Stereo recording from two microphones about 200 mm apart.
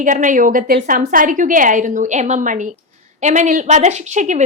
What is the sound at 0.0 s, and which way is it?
A woman's voice, 40° right (ahead or behind).